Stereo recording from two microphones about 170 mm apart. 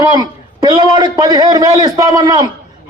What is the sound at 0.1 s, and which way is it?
A man's voice, 25° right (ahead or behind).